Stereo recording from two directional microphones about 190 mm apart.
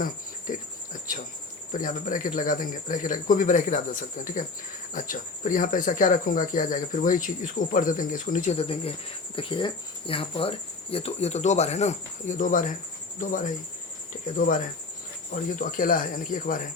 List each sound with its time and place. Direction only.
0.0 s cricket: 45° left (ahead or behind)
1.7 s speech: 45° left (ahead or behind)
8.5 s speech: 30° left (ahead or behind)